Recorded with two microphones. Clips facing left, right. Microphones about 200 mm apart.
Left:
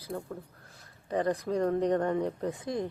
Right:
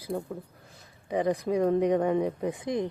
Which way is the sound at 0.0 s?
10° right (ahead or behind).